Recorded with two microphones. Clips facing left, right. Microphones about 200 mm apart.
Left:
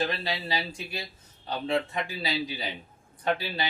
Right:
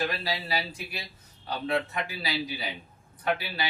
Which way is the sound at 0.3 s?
25° left (ahead or behind).